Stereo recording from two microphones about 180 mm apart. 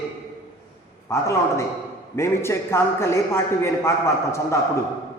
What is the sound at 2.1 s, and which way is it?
A man's voice, 15° left (ahead or behind).